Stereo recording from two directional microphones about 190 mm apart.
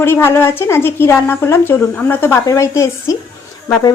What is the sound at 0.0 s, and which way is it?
A woman's voice, 10° left (ahead or behind).